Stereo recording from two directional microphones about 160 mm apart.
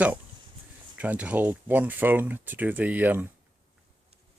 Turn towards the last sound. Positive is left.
turn(degrees=-10)  # may be behind; listen again after turning